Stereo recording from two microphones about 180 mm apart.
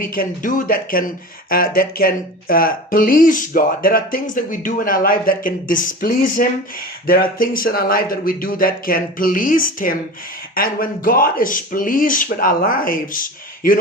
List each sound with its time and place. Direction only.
0.0 s speech: 55° left (ahead or behind)